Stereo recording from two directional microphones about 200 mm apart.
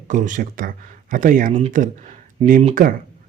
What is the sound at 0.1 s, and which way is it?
Speech, 40° right (ahead or behind).